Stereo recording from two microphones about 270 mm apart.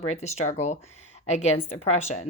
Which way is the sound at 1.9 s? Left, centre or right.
Left.